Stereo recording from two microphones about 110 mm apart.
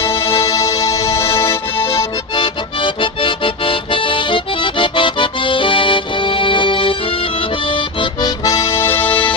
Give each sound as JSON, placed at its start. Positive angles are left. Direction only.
{"t": 0.2, "sound": "music", "side_deg": 60}
{"t": 0.5, "sound": "music", "side_deg": 30}
{"t": 2.3, "sound": "music", "side_deg": 50}
{"t": 7.7, "sound": "accordion", "side_deg": 50}
{"t": 8.4, "sound": "accordion", "side_deg": 30}